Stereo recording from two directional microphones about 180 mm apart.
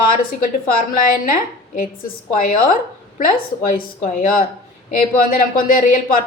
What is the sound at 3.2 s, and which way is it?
A woman's voice, 50° left (ahead or behind).